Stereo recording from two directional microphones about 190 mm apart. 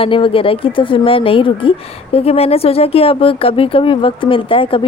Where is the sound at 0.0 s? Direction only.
30° left (ahead or behind).